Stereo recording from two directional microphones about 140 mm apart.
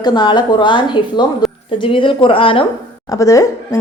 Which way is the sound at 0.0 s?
30° left (ahead or behind).